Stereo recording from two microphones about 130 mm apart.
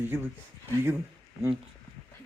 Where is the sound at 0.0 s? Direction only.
15° right (ahead or behind).